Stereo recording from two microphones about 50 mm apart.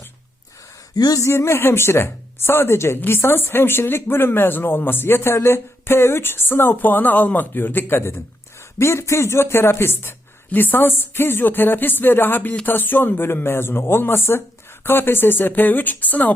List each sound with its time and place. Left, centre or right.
1.2 s speech: left
8.8 s speech: left